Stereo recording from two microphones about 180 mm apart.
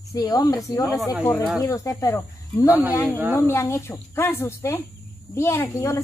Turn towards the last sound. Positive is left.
turn(degrees=15)  # may be behind; listen again after turning